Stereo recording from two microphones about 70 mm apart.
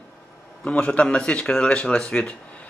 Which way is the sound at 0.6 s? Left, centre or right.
Centre.